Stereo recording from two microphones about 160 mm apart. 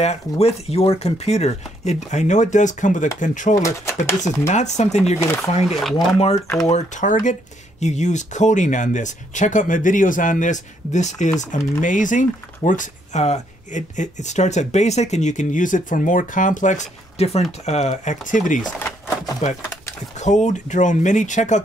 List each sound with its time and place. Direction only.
0.0 s speech: 40° left (ahead or behind)
3.6 s speech: 15° left (ahead or behind)
4.2 s speech: 45° left (ahead or behind)
6.4 s speech: 15° left (ahead or behind)
6.7 s speech: 50° left (ahead or behind)
18.8 s a sound: 15° left (ahead or behind)
20.2 s speech: 50° left (ahead or behind)